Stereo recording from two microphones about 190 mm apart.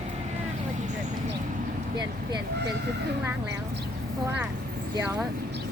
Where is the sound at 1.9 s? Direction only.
25° right (ahead or behind).